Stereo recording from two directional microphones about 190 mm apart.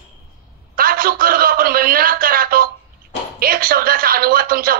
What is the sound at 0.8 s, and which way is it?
Speech, 50° right (ahead or behind).